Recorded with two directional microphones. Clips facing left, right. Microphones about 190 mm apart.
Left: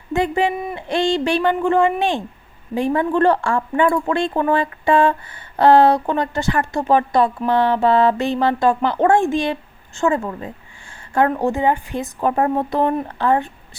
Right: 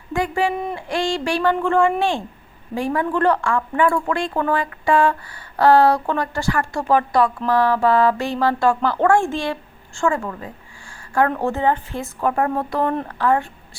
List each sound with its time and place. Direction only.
0.1 s speech: 20° left (ahead or behind)
0.5 s a woman's voice: 5° left (ahead or behind)
0.8 s a woman's voice: 20° left (ahead or behind)